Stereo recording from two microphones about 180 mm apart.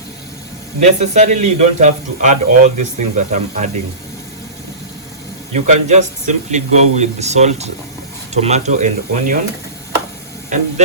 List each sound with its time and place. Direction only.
0.8 s speech: 40° right (ahead or behind)
5.5 s speech: 40° right (ahead or behind)